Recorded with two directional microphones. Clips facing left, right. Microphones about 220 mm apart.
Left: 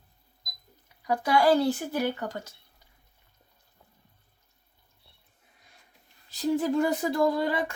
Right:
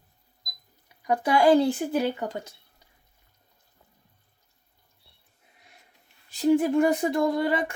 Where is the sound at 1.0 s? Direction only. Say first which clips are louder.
Right 2 dB; 20° right (ahead or behind).